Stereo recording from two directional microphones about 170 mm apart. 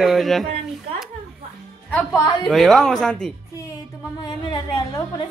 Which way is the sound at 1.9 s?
10° left (ahead or behind).